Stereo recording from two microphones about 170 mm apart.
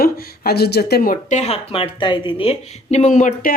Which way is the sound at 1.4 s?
35° left (ahead or behind).